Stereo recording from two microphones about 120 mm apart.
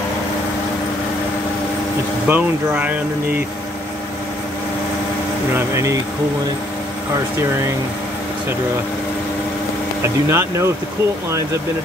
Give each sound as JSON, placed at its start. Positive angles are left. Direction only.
{"t": 2.2, "sound": "speech", "side_deg": -15}
{"t": 5.5, "sound": "speech", "side_deg": -25}
{"t": 10.0, "sound": "speech", "side_deg": -20}